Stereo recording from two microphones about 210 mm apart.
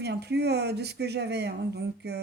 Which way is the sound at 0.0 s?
50° right (ahead or behind).